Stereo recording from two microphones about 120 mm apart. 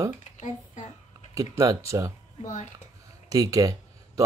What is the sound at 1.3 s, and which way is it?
Speech, 30° right (ahead or behind).